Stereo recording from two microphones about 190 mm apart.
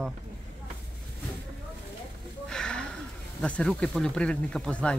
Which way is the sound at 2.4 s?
5° left (ahead or behind).